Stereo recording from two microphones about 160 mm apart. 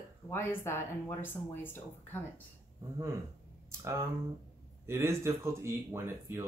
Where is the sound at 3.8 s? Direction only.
15° right (ahead or behind).